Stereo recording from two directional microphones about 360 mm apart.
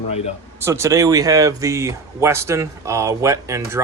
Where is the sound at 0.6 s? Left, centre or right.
Centre.